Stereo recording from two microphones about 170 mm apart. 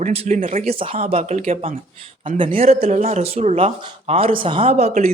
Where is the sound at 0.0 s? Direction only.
45° right (ahead or behind).